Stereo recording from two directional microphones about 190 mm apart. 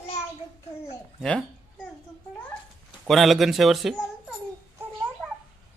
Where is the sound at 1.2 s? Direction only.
5° left (ahead or behind).